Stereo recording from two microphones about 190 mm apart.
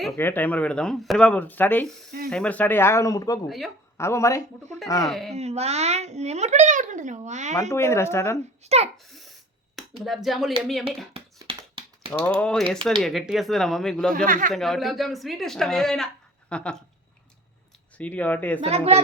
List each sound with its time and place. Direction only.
0.2 s speech: 10° left (ahead or behind)
5.0 s speech: centre (ahead or behind)
5.3 s a child's voice: 35° right (ahead or behind)
7.7 s speech: 15° left (ahead or behind)
8.6 s a child's voice: 35° right (ahead or behind)
10.0 s speech: centre (ahead or behind)
11.4 s a sound: 30° right (ahead or behind)
12.4 s speech: 5° left (ahead or behind)
14.3 s speech: 45° right (ahead or behind)
14.5 s speech: centre (ahead or behind)
17.9 s speech: 5° left (ahead or behind)
18.6 s a child's voice: 35° right (ahead or behind)